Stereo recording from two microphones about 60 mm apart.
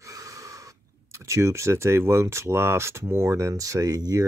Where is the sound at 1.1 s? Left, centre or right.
Right.